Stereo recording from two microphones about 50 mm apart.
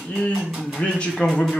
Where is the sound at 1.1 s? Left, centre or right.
Centre.